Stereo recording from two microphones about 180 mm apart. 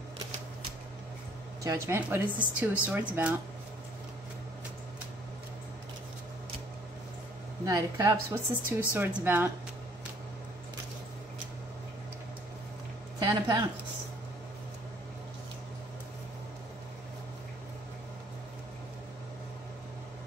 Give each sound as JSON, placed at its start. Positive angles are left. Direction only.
{"t": 1.6, "sound": "a woman's voice", "side_deg": -15}
{"t": 7.6, "sound": "a woman's voice", "side_deg": -20}
{"t": 13.2, "sound": "speech", "side_deg": -25}